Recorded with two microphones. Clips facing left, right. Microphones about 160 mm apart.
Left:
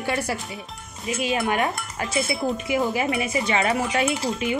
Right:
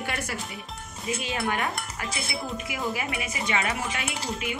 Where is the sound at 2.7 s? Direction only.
30° left (ahead or behind).